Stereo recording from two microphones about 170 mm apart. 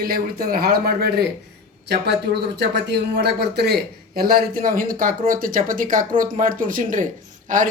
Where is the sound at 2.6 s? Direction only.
75° right (ahead or behind); by 7.7 s 50° right (ahead or behind).